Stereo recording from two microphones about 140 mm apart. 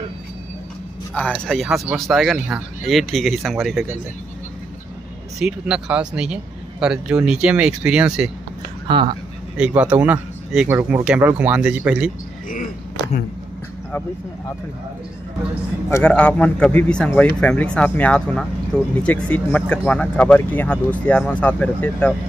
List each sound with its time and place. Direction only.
1.1 s speech: 10° left (ahead or behind)
5.4 s a man's voice: 5° right (ahead or behind)
8.8 s speech: 35° right (ahead or behind)
9.6 s a man's voice: 10° right (ahead or behind)
15.9 s speech: 10° left (ahead or behind)